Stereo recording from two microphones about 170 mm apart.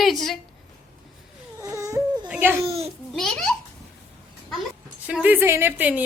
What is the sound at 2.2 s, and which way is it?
Speech, 10° right (ahead or behind).